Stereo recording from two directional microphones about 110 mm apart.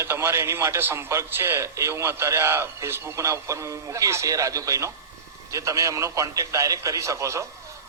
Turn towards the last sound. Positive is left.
turn(degrees=-25)  # may be behind; listen again after turning